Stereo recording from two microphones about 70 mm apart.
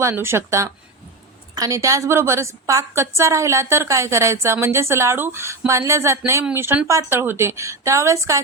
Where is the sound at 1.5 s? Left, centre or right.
Right.